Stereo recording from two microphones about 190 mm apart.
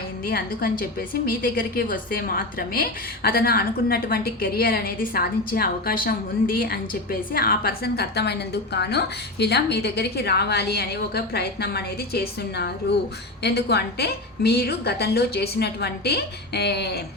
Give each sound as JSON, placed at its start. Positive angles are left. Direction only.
{"t": 0.3, "sound": "a woman's voice", "side_deg": 50}